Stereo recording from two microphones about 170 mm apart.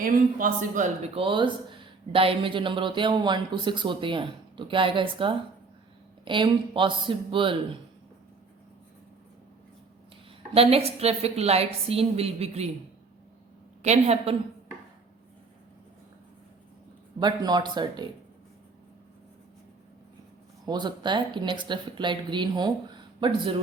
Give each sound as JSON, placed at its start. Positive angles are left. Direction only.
{"t": 0.0, "sound": "speech", "side_deg": -55}
{"t": 10.5, "sound": "a woman's voice", "side_deg": -35}
{"t": 13.8, "sound": "a woman's voice", "side_deg": -40}
{"t": 17.2, "sound": "speech", "side_deg": -25}
{"t": 20.7, "sound": "speech", "side_deg": -25}